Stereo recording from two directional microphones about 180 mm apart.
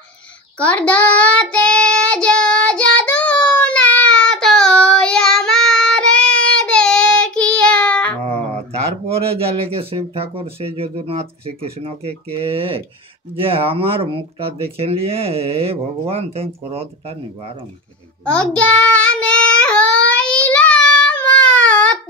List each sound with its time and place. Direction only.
0.6 s child singing: 10° left (ahead or behind)
8.7 s speech: 35° right (ahead or behind)
18.2 s child singing: 5° left (ahead or behind)